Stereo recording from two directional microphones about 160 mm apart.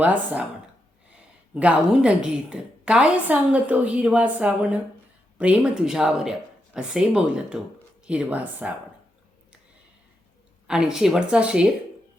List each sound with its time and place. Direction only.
0.0 s a woman's voice: 10° right (ahead or behind)
1.5 s a woman's voice: 5° right (ahead or behind)
10.7 s speech: 5° right (ahead or behind)